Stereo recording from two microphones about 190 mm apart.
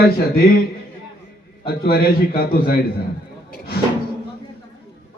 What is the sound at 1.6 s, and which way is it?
A man's voice, 55° left (ahead or behind).